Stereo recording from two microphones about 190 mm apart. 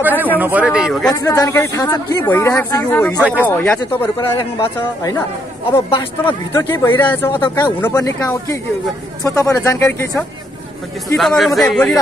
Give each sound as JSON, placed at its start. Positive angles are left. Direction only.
{"t": 0.4, "sound": "a man's voice", "side_deg": -10}
{"t": 1.1, "sound": "speech", "side_deg": 20}
{"t": 3.2, "sound": "speech", "side_deg": -10}
{"t": 3.4, "sound": "speech", "side_deg": 10}
{"t": 4.2, "sound": "speech", "side_deg": 25}
{"t": 6.2, "sound": "speech", "side_deg": 10}
{"t": 11.1, "sound": "a man's voice", "side_deg": 0}